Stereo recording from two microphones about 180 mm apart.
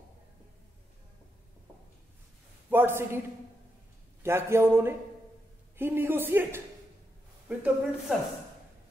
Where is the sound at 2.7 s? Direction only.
10° right (ahead or behind).